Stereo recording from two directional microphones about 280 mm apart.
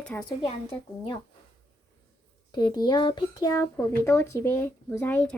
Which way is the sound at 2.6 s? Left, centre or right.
Centre.